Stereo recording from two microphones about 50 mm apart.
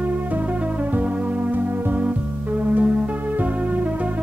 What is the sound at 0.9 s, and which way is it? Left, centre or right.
Music, right.